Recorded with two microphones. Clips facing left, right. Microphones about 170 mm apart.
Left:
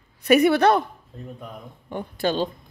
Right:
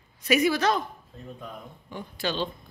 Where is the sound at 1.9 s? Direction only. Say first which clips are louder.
Left 7 dB; 55° left (ahead or behind).